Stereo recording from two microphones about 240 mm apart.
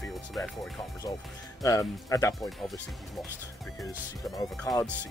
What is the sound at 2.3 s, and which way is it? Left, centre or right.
Speech, centre.